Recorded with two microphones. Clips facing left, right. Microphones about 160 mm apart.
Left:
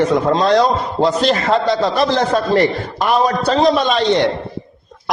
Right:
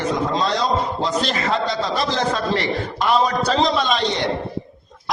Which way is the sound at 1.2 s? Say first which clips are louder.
Left 7 dB; 40° left (ahead or behind).